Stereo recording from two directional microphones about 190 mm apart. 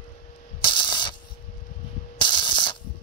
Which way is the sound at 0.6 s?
25° left (ahead or behind).